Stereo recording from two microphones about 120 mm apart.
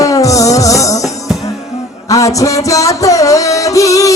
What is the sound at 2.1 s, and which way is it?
Music, 30° left (ahead or behind).